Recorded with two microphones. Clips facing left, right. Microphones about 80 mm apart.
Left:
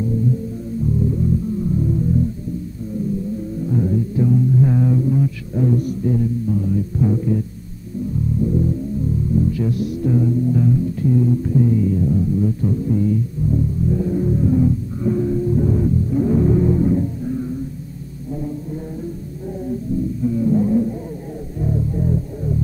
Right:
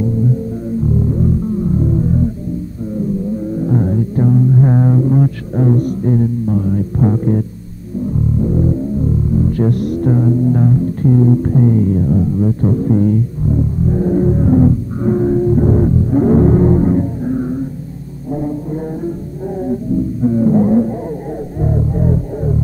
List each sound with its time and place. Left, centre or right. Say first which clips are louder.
1.8 s music: right 3 dB; right
3.5 s music: right 3 dB; right
19.6 s music: right 5 dB; right